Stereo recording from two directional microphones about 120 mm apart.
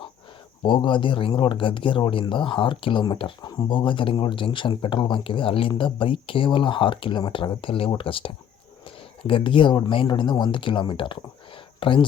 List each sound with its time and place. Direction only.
0.6 s speech: 45° left (ahead or behind)